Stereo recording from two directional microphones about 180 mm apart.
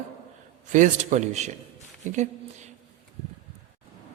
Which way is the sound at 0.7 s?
45° right (ahead or behind).